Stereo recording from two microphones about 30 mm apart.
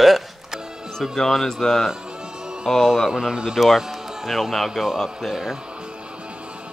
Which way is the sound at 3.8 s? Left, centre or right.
Centre.